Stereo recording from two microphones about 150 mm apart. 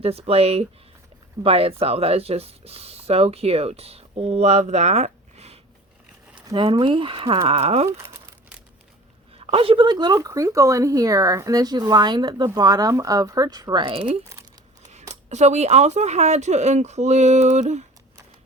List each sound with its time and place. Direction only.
0.0 s speech: 40° right (ahead or behind)
6.6 s speech: 40° right (ahead or behind)
9.5 s speech: 40° right (ahead or behind)
15.1 s speech: 50° right (ahead or behind)